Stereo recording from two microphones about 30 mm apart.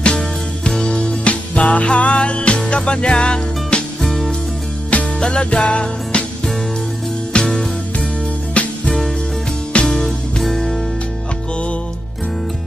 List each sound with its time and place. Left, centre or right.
0.8 s music: left
1.2 s music: left
4.0 s music: centre
4.9 s music: left
5.4 s music: left
7.3 s music: left
8.6 s music: left
9.8 s music: centre